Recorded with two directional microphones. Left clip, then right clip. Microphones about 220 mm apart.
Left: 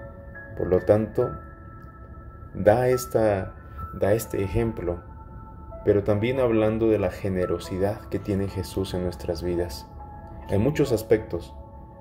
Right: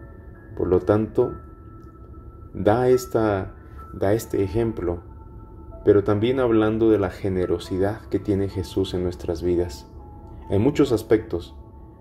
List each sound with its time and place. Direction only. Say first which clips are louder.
0.6 s speech: right 1 dB; 15° right (ahead or behind)
2.6 s speech: right 1 dB; 15° right (ahead or behind)